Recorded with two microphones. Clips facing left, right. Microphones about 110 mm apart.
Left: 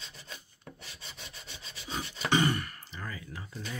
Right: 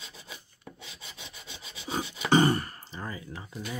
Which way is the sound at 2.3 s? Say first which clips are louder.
Right 5 dB; 35° right (ahead or behind).